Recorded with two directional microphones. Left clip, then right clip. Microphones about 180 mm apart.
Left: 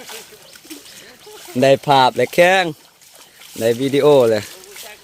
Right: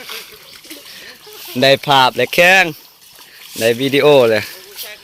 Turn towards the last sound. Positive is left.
turn(degrees=5)  # may be behind; listen again after turning